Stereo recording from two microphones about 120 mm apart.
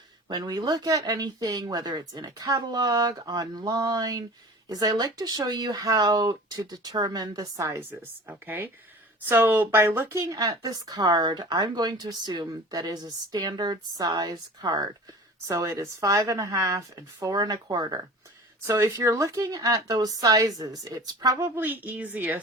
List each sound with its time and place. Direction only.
0.3 s a woman's voice: 35° right (ahead or behind); by 22.4 s 15° right (ahead or behind)